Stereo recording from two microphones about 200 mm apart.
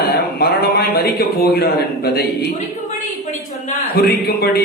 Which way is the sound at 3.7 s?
50° left (ahead or behind).